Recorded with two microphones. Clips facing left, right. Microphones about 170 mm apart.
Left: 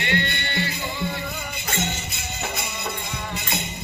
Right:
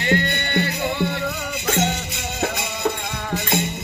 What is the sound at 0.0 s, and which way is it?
Music, 40° right (ahead or behind).